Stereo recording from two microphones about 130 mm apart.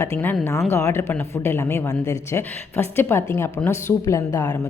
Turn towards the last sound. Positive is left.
turn(degrees=25)  # may be behind; listen again after turning